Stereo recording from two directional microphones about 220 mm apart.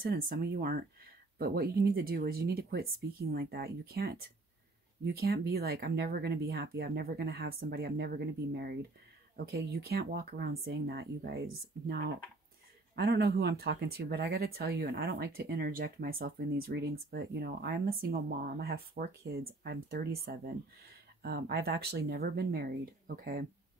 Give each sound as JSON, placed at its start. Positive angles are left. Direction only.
{"t": 0.0, "sound": "speech", "side_deg": -45}
{"t": 12.9, "sound": "speech", "side_deg": -50}